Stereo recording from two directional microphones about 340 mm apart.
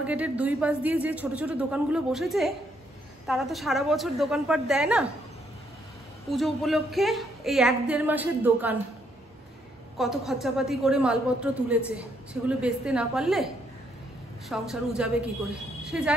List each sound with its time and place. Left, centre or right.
0.0 s a woman's voice: centre
6.3 s a woman's voice: centre
9.9 s a woman's voice: centre
14.5 s a woman's voice: centre